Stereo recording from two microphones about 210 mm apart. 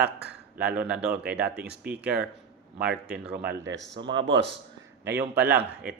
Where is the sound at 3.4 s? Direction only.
60° right (ahead or behind).